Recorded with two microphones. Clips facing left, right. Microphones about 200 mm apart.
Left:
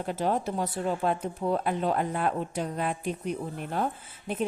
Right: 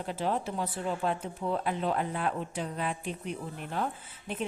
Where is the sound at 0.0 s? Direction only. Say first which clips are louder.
Left 3 dB; 45° left (ahead or behind).